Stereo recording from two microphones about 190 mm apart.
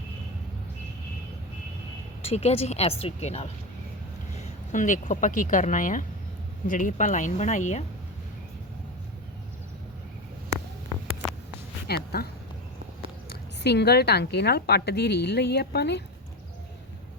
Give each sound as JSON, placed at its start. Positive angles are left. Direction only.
{"t": 2.2, "sound": "speech", "side_deg": 35}
{"t": 11.9, "sound": "speech", "side_deg": 55}
{"t": 13.3, "sound": "a woman's voice", "side_deg": 60}